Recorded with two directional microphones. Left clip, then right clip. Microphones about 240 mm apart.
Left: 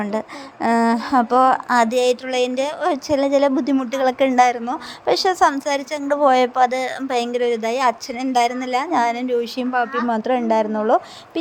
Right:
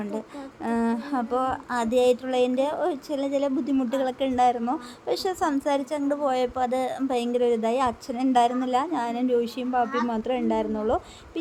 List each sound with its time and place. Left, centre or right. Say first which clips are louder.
0.6 s a woman's voice: left 10 dB; left